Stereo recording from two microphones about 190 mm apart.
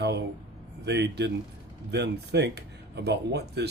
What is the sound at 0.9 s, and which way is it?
Speech, 65° right (ahead or behind).